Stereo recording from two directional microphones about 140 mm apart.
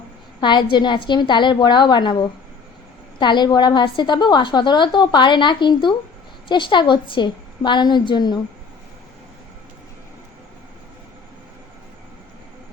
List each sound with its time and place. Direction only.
0.4 s a woman's voice: 30° left (ahead or behind)